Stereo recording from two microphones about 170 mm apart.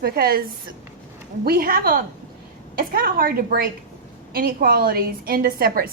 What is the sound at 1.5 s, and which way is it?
A woman's voice, 60° right (ahead or behind).